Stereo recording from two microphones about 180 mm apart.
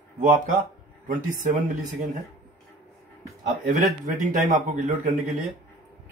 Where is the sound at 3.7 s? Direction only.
45° right (ahead or behind).